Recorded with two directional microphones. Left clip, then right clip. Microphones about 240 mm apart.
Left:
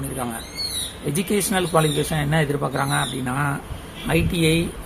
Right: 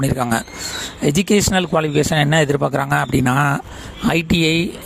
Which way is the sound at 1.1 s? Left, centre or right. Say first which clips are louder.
Right 5 dB; right.